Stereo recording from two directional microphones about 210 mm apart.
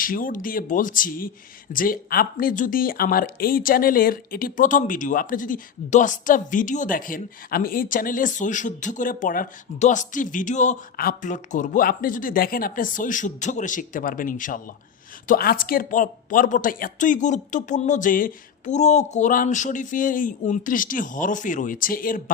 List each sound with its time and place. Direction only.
0.0 s speech: 40° left (ahead or behind)